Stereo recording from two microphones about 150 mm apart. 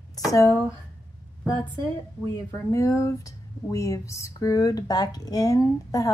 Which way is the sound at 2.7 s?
20° left (ahead or behind).